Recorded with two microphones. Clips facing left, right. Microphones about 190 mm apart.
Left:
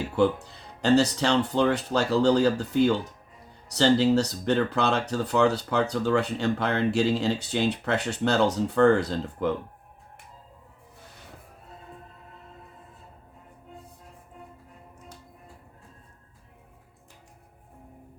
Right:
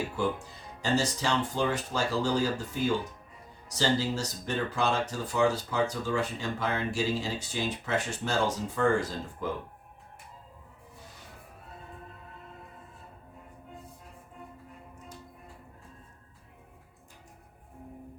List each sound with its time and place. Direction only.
0.2 s speech: 70° left (ahead or behind)